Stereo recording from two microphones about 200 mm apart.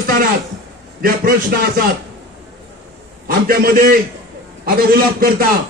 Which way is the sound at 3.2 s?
45° right (ahead or behind).